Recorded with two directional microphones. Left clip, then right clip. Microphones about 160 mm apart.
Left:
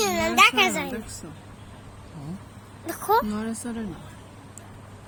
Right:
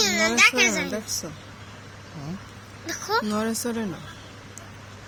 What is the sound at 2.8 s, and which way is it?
Speech, 60° left (ahead or behind).